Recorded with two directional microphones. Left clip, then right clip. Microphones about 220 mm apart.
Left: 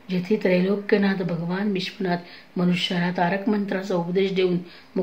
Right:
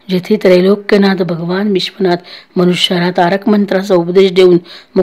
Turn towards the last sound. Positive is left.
turn(degrees=-50)  # may be behind; listen again after turning